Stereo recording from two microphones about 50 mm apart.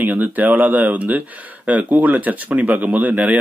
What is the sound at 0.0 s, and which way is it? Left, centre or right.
Speech, right.